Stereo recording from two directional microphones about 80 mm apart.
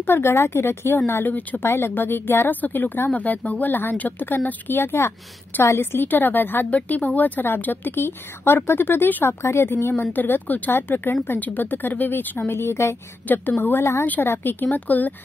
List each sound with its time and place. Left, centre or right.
0.0 s speech: left
1.7 s speech: left